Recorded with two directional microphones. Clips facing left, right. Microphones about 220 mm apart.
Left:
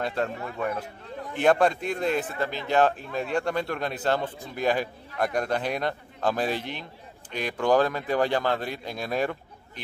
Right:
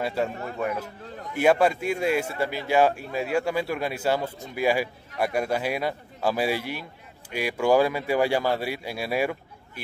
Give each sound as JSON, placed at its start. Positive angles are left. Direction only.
{"t": 0.0, "sound": "a man's voice", "side_deg": -5}